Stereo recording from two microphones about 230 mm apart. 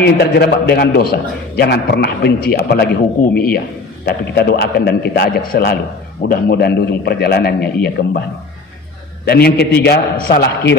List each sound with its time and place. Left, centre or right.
0.0 s a man's voice: left
9.2 s a man's voice: left